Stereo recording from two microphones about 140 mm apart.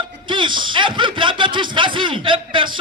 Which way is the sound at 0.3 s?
35° right (ahead or behind).